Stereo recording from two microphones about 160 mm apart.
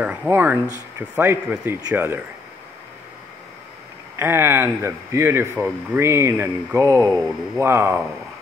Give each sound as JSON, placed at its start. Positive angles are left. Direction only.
{"t": 0.0, "sound": "speech", "side_deg": -5}
{"t": 4.2, "sound": "speech", "side_deg": -15}